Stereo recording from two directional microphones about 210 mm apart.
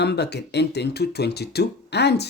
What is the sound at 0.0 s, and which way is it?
Speech, 55° left (ahead or behind).